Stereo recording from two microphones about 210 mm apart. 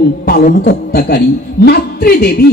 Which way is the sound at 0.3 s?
45° left (ahead or behind).